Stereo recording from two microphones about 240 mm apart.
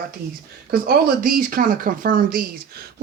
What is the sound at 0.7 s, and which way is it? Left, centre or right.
Speech, right.